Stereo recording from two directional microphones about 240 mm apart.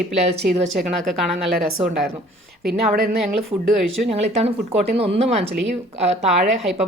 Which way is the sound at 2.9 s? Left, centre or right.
Right.